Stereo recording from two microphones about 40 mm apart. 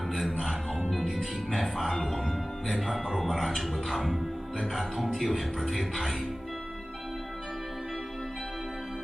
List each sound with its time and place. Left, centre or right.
0.1 s music: centre
1.5 s music: centre
2.8 s speech: centre